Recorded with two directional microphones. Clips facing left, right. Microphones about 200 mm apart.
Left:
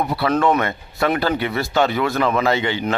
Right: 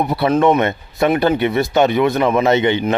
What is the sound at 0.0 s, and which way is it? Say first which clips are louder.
Speech: right 4 dB; 20° right (ahead or behind).